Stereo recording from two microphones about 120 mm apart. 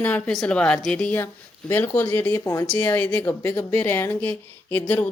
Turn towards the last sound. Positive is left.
turn(degrees=15)  # may be behind; listen again after turning